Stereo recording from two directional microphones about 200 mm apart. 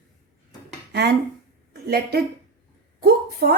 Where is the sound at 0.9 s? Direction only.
55° right (ahead or behind).